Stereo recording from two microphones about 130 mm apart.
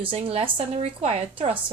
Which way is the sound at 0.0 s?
45° right (ahead or behind).